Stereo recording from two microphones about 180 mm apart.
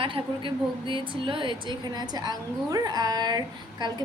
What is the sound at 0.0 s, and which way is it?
A woman's voice, 30° right (ahead or behind).